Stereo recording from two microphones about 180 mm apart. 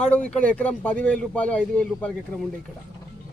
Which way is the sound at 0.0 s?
5° left (ahead or behind).